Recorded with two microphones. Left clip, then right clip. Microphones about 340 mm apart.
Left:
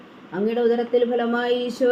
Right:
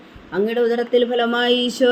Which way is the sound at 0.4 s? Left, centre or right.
Right.